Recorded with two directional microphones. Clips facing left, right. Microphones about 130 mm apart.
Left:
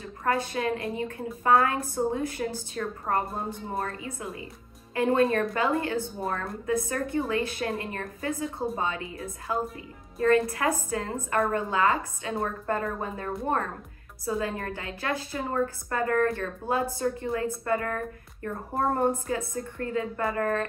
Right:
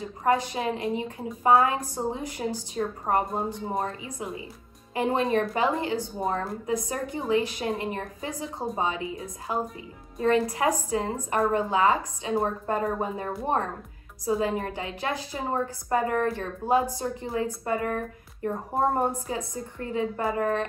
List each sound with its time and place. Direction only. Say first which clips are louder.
0.0 s a woman's voice: right 3 dB; 20° right (ahead or behind)